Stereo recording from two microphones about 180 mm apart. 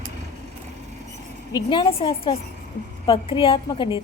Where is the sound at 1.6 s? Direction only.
25° left (ahead or behind).